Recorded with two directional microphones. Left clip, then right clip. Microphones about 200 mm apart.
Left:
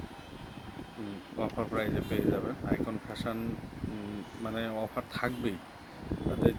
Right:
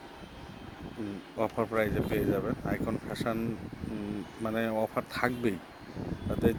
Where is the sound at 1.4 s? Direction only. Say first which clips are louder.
Right 4 dB; 35° right (ahead or behind).